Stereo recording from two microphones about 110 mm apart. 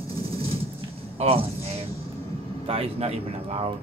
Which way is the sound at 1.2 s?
65° right (ahead or behind).